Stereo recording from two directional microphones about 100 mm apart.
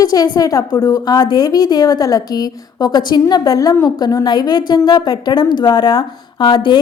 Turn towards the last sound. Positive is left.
turn(degrees=55)  # may be behind; listen again after turning